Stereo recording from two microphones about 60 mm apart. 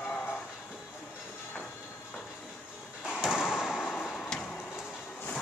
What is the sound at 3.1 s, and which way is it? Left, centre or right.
Slam, centre.